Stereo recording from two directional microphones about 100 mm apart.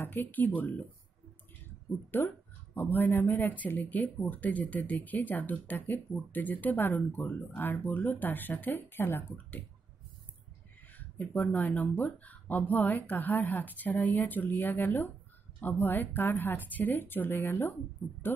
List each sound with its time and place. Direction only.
0.0 s speech: 20° left (ahead or behind)
2.0 s speech: 20° left (ahead or behind)
11.3 s a woman's voice: 15° left (ahead or behind)